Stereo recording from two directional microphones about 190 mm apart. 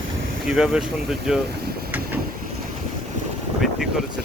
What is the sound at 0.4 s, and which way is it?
Speech, 5° right (ahead or behind).